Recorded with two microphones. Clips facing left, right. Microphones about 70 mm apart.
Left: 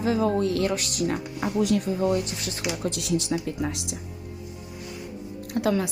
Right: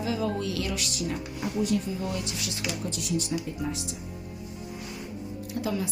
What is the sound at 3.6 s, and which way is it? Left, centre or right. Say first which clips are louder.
Speech: left 3 dB; left.